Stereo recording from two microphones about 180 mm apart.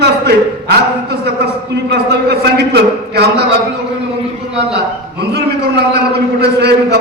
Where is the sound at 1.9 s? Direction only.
65° right (ahead or behind).